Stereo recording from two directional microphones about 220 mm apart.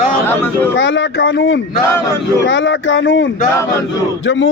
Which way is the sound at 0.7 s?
55° left (ahead or behind).